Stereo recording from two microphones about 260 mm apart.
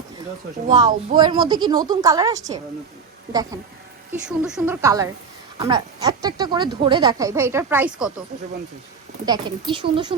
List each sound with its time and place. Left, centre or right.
0.7 s speech: centre
4.3 s speech: centre
9.2 s speech: centre